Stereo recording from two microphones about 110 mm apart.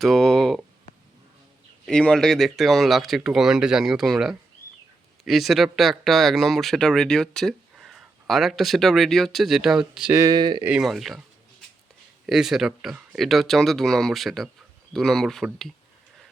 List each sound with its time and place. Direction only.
0.0 s a sound: centre (ahead or behind)
1.9 s speech: 10° left (ahead or behind)
10.1 s speech: 25° right (ahead or behind)
10.3 s speech: 40° right (ahead or behind)
10.7 s speech: 5° right (ahead or behind)
12.2 s speech: 5° right (ahead or behind)